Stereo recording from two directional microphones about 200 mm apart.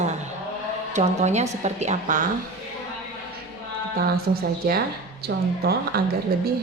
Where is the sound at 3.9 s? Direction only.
50° right (ahead or behind).